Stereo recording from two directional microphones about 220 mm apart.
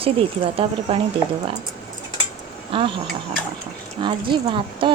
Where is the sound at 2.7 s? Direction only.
20° right (ahead or behind).